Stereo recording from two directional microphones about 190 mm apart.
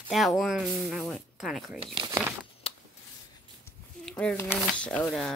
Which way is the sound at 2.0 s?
15° right (ahead or behind).